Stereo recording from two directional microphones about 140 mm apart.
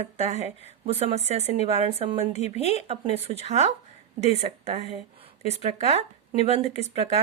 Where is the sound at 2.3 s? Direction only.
50° left (ahead or behind).